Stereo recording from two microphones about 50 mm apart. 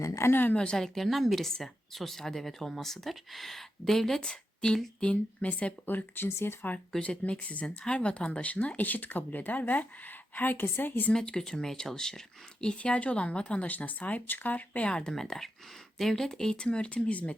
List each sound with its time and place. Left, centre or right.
0.3 s speech: left
0.5 s speech: centre
0.9 s speech: centre; by 5.7 s left
5.8 s speech: left
6.4 s speech: left
7.0 s speech: left
11.1 s speech: centre
12.6 s speech: left
15.1 s speech: centre
16.6 s speech: left